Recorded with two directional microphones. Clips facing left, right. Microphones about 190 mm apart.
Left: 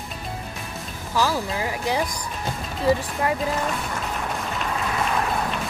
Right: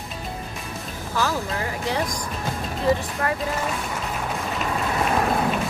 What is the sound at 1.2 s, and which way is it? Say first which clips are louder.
Speech: left 1 dB; 15° left (ahead or behind).